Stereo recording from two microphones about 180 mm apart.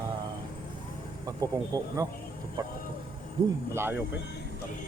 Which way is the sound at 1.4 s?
20° right (ahead or behind).